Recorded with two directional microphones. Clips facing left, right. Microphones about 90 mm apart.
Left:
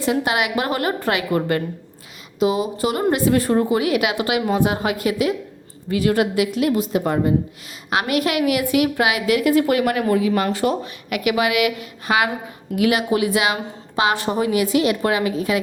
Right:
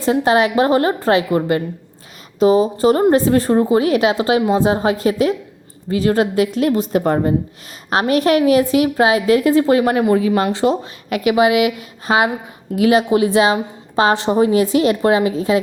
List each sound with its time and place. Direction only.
0.0 s a woman's voice: 35° right (ahead or behind)
2.4 s a woman's voice: 35° right (ahead or behind)